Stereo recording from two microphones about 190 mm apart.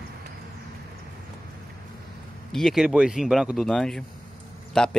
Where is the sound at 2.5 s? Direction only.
Centre (ahead or behind).